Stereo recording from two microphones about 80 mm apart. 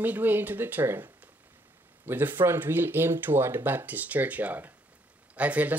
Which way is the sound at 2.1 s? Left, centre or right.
Right.